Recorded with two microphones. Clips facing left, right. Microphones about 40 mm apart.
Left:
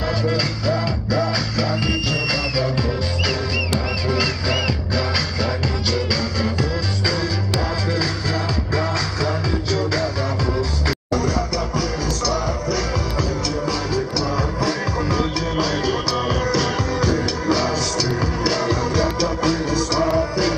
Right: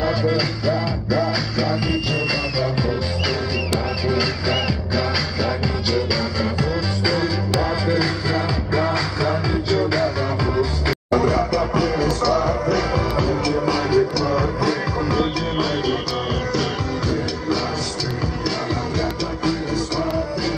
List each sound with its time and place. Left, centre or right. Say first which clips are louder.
0.0 s music: right 2 dB; centre
4.1 s music: even; centre
7.1 s music: right 2 dB; centre
18.9 s music: left 4 dB; centre